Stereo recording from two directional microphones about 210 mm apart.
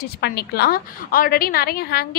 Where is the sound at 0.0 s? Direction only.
50° left (ahead or behind).